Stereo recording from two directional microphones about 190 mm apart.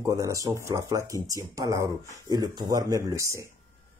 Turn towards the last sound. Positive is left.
turn(degrees=-20)  # may be behind; listen again after turning